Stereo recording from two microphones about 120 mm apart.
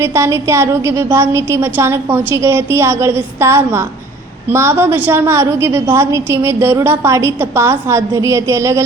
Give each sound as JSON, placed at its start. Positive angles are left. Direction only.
{"t": 0.0, "sound": "a woman's voice", "side_deg": -25}